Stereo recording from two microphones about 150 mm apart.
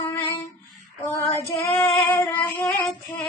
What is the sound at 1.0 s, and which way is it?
Female singing, 20° left (ahead or behind).